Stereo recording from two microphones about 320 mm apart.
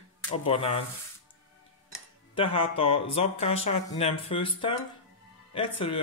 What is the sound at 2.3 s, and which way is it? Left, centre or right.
Speech, centre.